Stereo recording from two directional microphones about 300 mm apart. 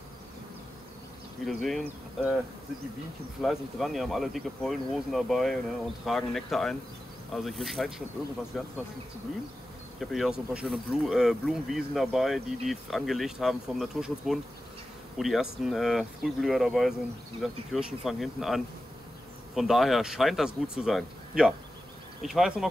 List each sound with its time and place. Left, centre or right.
1.4 s speech: centre
3.4 s speech: centre
9.9 s speech: centre